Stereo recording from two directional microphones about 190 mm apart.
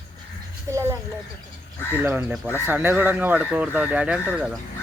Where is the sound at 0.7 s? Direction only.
15° right (ahead or behind).